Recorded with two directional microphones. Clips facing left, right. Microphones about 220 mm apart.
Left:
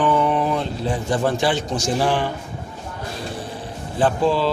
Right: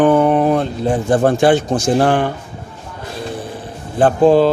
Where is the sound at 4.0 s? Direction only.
50° right (ahead or behind).